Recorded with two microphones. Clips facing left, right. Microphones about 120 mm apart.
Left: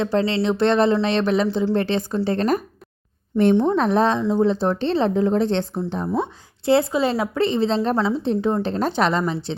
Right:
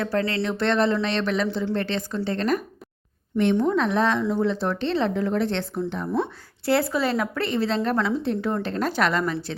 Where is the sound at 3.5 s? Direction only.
25° left (ahead or behind).